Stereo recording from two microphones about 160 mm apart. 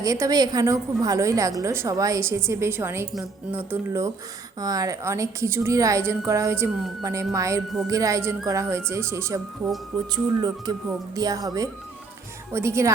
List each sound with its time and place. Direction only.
0.0 s a woman's voice: 20° right (ahead or behind)